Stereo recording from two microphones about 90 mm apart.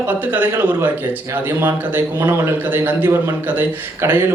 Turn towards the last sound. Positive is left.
turn(degrees=-20)  # may be behind; listen again after turning